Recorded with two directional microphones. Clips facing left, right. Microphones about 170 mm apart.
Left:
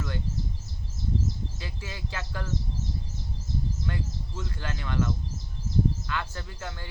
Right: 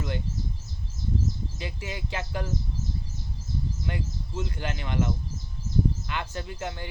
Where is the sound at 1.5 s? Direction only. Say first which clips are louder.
Right 4 dB; 20° right (ahead or behind).